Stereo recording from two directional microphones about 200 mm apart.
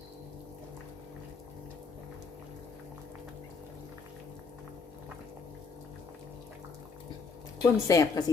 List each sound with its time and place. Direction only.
7.6 s a woman's voice: 15° left (ahead or behind)